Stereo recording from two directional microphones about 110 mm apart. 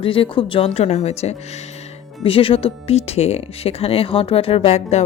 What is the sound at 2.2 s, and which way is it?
Speech, 55° left (ahead or behind).